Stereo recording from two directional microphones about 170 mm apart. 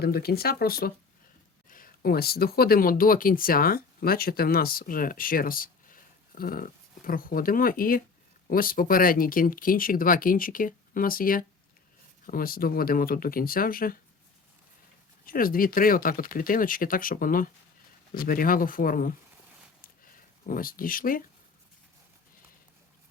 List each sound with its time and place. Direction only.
0.0 s speech: 65° left (ahead or behind)
15.3 s speech: 55° left (ahead or behind)
19.8 s a sound: 55° left (ahead or behind)